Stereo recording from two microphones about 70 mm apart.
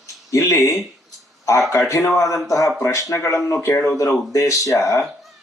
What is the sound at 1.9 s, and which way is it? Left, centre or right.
Speech, left.